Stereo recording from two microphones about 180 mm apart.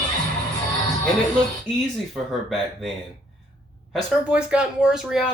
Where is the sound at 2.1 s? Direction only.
Centre (ahead or behind).